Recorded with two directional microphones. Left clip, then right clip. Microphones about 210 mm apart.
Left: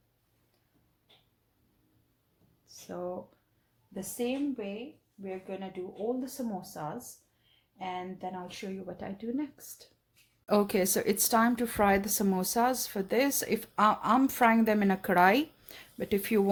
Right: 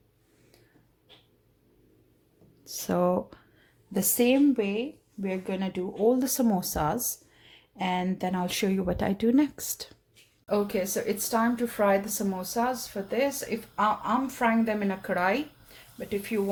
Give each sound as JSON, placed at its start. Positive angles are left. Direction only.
{"t": 2.6, "sound": "speech", "side_deg": -45}
{"t": 10.4, "sound": "speech", "side_deg": 45}